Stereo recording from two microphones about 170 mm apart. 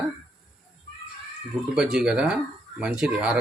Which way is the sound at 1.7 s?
5° right (ahead or behind).